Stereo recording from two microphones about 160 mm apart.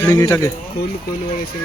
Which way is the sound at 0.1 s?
20° left (ahead or behind).